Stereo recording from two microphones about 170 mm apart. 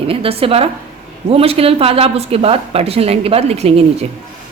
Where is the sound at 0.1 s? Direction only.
35° right (ahead or behind).